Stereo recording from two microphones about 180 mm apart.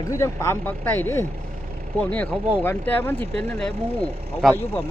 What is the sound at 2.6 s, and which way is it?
Speech, 10° left (ahead or behind).